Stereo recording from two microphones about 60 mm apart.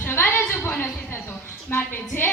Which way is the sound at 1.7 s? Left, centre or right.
Left.